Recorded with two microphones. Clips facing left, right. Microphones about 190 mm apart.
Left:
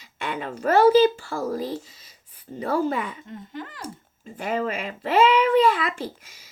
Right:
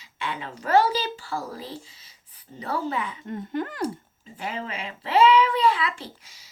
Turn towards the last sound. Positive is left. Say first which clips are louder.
# left 2 dB
turn(degrees=45)  # may be behind; listen again after turning